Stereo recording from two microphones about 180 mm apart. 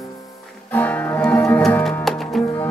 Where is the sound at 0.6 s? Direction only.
10° left (ahead or behind).